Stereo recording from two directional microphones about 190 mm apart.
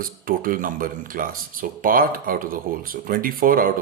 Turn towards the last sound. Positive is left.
turn(degrees=-50)  # may be behind; listen again after turning